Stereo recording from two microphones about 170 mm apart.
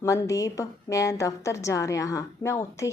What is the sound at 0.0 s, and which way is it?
A woman's voice, 20° left (ahead or behind).